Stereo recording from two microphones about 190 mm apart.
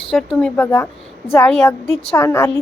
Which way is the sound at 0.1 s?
Centre (ahead or behind).